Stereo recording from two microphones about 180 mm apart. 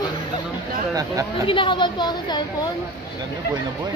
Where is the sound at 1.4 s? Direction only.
30° left (ahead or behind).